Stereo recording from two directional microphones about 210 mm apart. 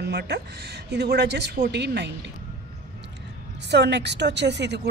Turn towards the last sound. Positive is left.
turn(degrees=-55)  # may be behind; listen again after turning